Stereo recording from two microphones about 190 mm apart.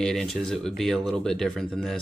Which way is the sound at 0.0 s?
Centre (ahead or behind).